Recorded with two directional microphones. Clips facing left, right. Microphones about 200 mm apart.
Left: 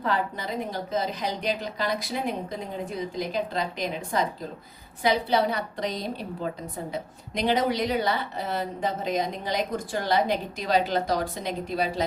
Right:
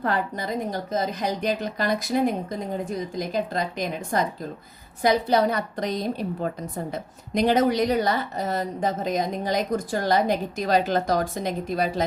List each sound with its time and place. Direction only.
0.0 s speech: 50° right (ahead or behind)